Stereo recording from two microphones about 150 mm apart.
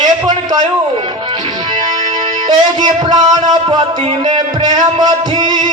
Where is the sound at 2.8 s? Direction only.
30° right (ahead or behind).